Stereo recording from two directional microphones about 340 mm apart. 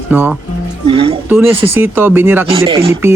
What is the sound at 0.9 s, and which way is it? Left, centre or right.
Speech, centre.